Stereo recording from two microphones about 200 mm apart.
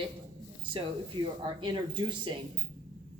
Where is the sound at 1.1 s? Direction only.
25° right (ahead or behind).